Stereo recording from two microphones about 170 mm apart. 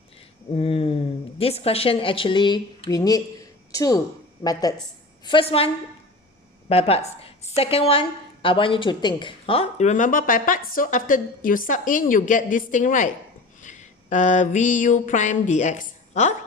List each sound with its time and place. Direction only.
0.5 s a sound: 35° left (ahead or behind)
1.4 s a woman's voice: 35° left (ahead or behind)
5.2 s a woman's voice: 30° left (ahead or behind); by 13.1 s 50° left (ahead or behind)
13.6 s mantra: 45° left (ahead or behind)